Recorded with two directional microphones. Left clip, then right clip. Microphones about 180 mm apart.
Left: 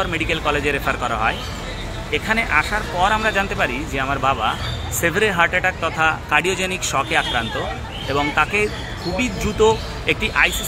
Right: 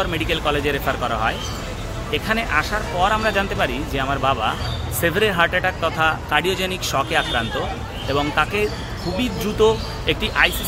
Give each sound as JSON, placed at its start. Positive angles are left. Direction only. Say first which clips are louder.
{"t": 0.0, "sound": "speech", "louder": "left 1 dB", "side_deg": -15}